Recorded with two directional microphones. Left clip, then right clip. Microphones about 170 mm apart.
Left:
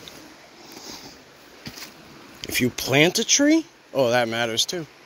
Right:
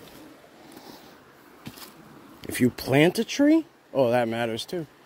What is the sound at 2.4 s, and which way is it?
Speech, 30° right (ahead or behind).